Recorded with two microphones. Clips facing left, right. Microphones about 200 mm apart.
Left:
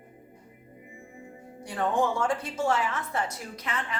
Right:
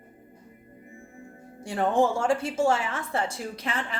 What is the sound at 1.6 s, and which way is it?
A woman's voice, 25° right (ahead or behind).